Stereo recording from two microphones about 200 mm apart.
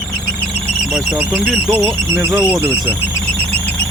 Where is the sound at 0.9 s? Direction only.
5° right (ahead or behind).